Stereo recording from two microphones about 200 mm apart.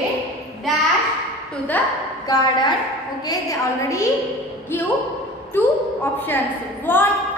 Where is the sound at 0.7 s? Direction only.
Centre (ahead or behind).